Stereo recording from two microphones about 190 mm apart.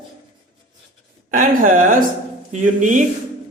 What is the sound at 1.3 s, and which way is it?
Speech, 45° right (ahead or behind).